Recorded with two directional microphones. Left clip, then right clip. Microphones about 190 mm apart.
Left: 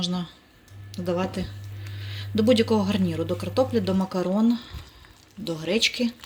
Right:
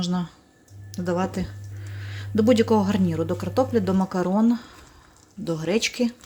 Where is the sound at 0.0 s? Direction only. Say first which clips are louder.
Even; 15° right (ahead or behind).